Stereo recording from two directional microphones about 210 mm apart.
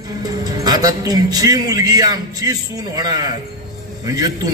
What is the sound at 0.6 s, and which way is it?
A man's voice, 20° right (ahead or behind).